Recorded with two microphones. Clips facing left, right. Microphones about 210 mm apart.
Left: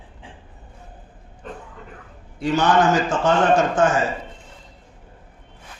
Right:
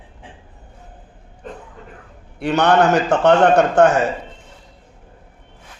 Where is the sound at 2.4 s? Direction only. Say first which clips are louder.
Right 3 dB; 65° right (ahead or behind).